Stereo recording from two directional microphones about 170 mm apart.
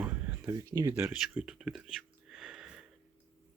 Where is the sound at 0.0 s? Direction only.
10° right (ahead or behind).